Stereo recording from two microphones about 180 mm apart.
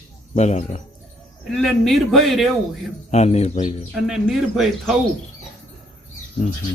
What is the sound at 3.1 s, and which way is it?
Speech, 40° left (ahead or behind).